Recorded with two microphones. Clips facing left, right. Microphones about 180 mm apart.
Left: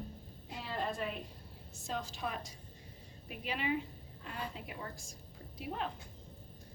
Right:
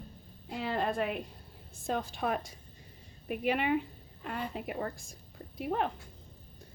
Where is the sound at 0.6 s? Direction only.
65° right (ahead or behind).